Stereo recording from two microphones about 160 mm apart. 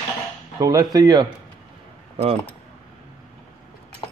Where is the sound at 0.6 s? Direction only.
20° right (ahead or behind).